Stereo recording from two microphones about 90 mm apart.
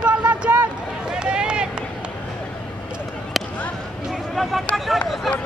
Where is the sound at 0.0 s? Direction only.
15° right (ahead or behind).